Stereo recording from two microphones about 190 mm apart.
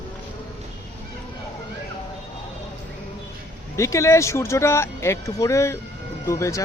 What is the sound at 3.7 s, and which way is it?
Speech, 15° left (ahead or behind).